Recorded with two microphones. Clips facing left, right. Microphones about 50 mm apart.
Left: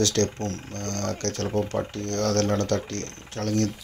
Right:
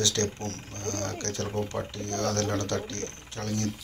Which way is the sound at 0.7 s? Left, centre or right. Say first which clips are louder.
Even; right.